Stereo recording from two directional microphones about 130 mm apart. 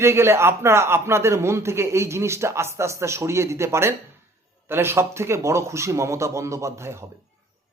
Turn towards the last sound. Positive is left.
turn(degrees=-20)  # may be behind; listen again after turning